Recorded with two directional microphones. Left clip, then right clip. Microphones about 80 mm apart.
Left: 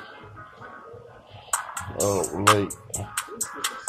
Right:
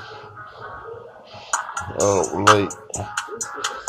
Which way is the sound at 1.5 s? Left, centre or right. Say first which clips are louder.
Right 5 dB; centre.